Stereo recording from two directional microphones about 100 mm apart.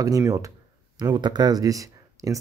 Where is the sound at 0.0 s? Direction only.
35° right (ahead or behind).